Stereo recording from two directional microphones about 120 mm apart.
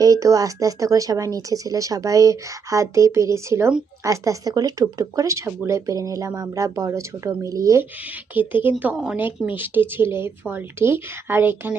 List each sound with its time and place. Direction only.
0.0 s speech: 30° right (ahead or behind)
8.0 s speech: 15° right (ahead or behind)